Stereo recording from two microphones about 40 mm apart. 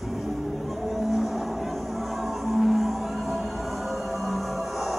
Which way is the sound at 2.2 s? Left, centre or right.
Centre.